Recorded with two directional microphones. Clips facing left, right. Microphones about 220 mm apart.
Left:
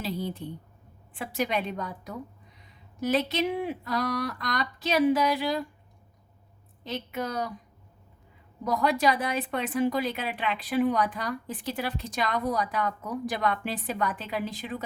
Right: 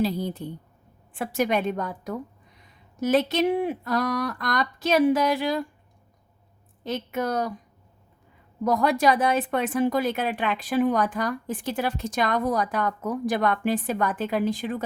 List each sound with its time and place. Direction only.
0.0 s a woman's voice: 40° right (ahead or behind)
6.8 s a woman's voice: 50° right (ahead or behind)
8.6 s a woman's voice: 50° right (ahead or behind)